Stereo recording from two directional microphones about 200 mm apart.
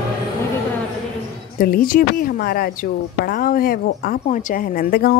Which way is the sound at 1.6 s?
45° left (ahead or behind).